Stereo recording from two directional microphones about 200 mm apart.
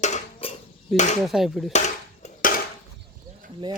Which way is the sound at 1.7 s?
35° left (ahead or behind).